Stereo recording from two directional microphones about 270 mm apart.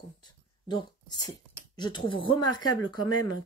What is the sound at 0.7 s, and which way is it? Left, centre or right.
Speech, centre.